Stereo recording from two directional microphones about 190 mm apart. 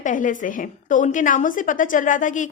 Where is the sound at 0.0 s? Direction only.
45° left (ahead or behind).